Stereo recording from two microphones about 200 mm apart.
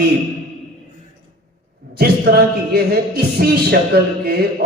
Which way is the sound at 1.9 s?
50° right (ahead or behind).